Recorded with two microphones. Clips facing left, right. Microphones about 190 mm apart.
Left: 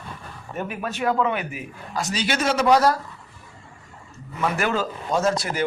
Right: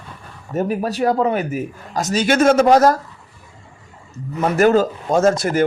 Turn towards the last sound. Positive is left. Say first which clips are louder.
# right 7 dB
turn(degrees=-50)  # may be behind; listen again after turning